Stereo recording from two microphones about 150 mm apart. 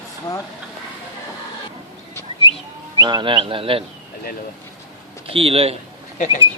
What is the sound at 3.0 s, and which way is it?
Speech, 30° right (ahead or behind).